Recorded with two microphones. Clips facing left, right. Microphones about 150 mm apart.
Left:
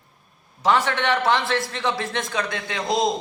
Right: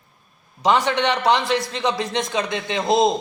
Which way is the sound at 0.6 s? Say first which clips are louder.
Right 2 dB; 20° right (ahead or behind).